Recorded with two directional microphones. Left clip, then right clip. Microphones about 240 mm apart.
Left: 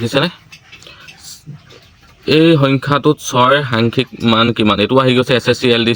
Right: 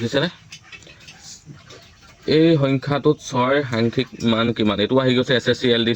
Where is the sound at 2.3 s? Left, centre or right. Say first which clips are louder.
Left 6 dB; left.